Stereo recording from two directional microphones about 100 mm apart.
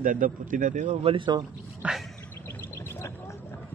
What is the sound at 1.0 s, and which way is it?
Speech, 55° right (ahead or behind).